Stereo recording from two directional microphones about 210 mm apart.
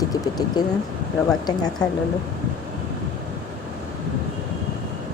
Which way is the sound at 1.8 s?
20° left (ahead or behind).